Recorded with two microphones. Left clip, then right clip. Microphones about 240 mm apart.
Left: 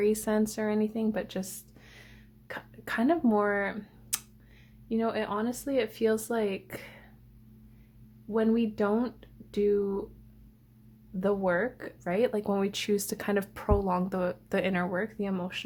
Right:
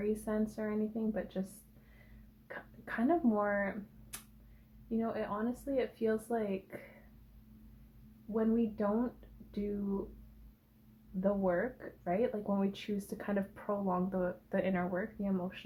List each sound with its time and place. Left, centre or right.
0.0 s speech: left
2.8 s speech: left
8.3 s speech: left
11.2 s speech: left